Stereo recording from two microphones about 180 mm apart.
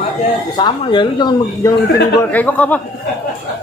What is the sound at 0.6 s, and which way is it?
Speech, 25° left (ahead or behind).